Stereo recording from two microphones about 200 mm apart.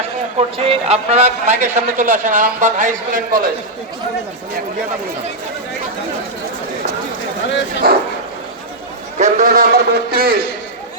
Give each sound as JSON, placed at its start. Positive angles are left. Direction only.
{"t": 0.3, "sound": "a man's voice", "side_deg": -30}
{"t": 7.8, "sound": "a man's voice", "side_deg": -50}
{"t": 9.1, "sound": "a man's voice", "side_deg": -40}